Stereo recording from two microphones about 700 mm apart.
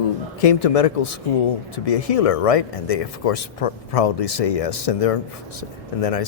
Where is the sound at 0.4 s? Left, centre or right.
Left.